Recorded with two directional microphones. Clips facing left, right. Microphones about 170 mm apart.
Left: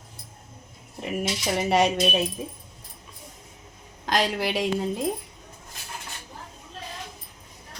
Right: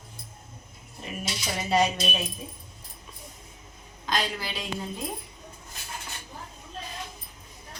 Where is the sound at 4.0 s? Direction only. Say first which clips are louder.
Left 6 dB; 75° left (ahead or behind).